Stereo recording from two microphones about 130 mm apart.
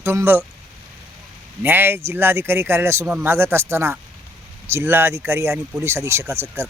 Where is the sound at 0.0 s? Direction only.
20° right (ahead or behind).